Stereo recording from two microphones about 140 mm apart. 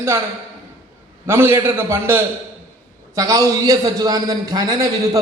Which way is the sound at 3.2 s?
25° right (ahead or behind).